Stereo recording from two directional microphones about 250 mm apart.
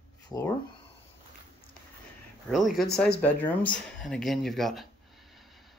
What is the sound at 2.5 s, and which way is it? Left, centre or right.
Speech, centre.